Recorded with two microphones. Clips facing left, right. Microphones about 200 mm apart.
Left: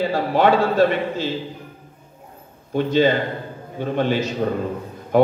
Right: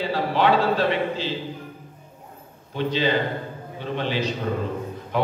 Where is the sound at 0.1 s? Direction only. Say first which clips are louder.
Left 1 dB; 45° left (ahead or behind).